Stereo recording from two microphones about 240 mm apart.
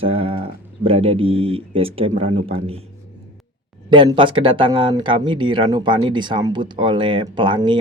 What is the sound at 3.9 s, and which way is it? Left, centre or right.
Speech, right.